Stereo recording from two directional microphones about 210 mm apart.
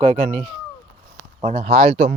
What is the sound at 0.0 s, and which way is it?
Speech, 30° right (ahead or behind).